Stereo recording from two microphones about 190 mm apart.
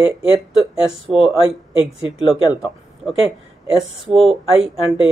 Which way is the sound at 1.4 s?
30° left (ahead or behind).